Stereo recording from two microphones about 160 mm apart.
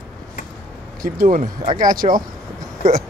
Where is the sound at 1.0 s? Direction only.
60° right (ahead or behind).